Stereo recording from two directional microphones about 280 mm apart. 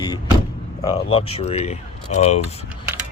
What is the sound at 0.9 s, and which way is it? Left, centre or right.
Speech, left.